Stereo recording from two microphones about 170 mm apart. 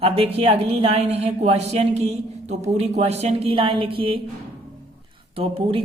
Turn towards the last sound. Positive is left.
turn(degrees=-30)  # may be behind; listen again after turning